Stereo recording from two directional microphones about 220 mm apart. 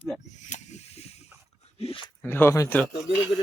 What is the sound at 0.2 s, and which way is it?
Snake, 35° left (ahead or behind).